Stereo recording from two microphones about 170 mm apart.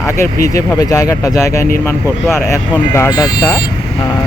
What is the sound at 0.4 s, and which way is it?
Speech, 20° left (ahead or behind).